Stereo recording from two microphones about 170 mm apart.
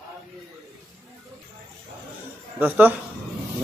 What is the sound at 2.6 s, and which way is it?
Speech, 10° right (ahead or behind).